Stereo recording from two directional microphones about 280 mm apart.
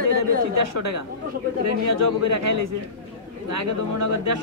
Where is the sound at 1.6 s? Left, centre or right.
Right.